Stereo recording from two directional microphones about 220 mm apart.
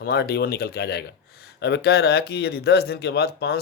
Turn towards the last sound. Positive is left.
turn(degrees=45)  # may be behind; listen again after turning